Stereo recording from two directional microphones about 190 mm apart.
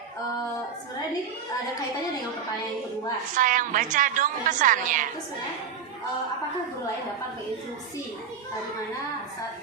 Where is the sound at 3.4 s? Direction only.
45° right (ahead or behind).